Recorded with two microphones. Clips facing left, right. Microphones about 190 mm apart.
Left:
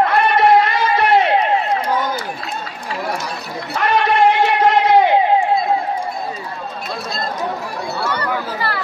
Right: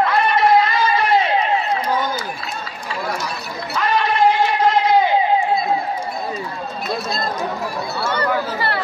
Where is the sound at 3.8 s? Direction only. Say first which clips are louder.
Left 2 dB; 65° left (ahead or behind).